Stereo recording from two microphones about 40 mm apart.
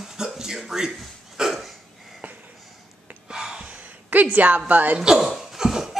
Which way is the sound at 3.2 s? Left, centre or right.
Centre.